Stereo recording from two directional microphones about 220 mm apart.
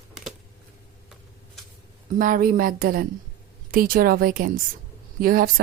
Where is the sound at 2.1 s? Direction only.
40° right (ahead or behind).